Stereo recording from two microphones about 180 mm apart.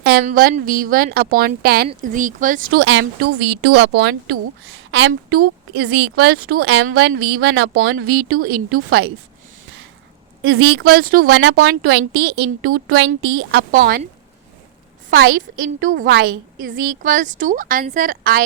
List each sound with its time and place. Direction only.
0.0 s a sound: 60° right (ahead or behind)
0.3 s a woman's voice: 50° right (ahead or behind)
2.1 s a woman's voice: 45° right (ahead or behind)
2.8 s a woman's voice: 90° right
3.7 s a woman's voice: 75° right (ahead or behind); by 5.4 s 90° right
5.4 s a woman's voice: 65° right (ahead or behind)
6.8 s a woman's voice: 55° right (ahead or behind); by 7.8 s 80° right
7.8 s a woman's voice: 60° right (ahead or behind)
10.4 s a woman's voice: 60° right (ahead or behind)
11.3 s a woman's voice: 70° right (ahead or behind)
13.7 s a woman's voice: 50° right (ahead or behind)
15.1 s a woman's voice: 90° right
15.8 s a woman's voice: 45° right (ahead or behind)